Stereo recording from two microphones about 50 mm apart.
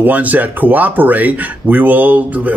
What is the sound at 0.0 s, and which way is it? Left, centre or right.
Speech, right.